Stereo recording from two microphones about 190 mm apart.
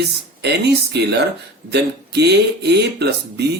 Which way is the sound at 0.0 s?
60° right (ahead or behind).